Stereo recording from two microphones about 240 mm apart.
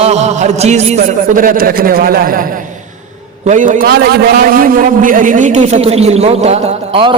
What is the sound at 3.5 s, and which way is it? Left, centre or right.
A man's voice, right.